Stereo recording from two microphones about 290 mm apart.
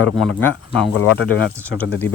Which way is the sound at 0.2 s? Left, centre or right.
Centre.